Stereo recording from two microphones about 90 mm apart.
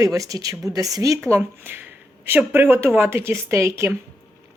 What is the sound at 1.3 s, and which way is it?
Speech, 25° right (ahead or behind).